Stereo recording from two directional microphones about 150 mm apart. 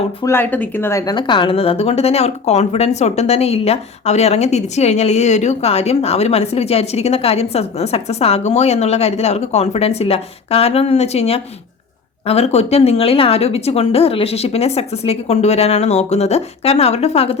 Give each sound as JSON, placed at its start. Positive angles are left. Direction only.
{"t": 0.3, "sound": "speech", "side_deg": 15}
{"t": 1.1, "sound": "speech", "side_deg": 35}